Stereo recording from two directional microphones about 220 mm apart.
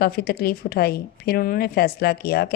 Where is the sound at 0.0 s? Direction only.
45° left (ahead or behind).